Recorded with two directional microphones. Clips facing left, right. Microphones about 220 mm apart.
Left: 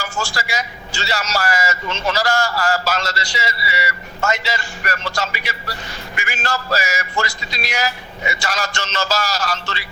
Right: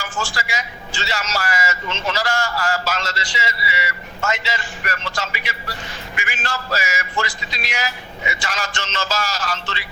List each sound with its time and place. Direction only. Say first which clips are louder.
0.3 s a man's voice: left 3 dB; 40° left (ahead or behind)